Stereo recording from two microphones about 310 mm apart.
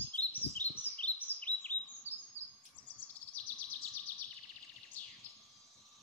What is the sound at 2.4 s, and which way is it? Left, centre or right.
Chirp, left.